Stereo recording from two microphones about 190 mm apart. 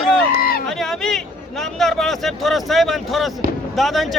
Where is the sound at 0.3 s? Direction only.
50° left (ahead or behind).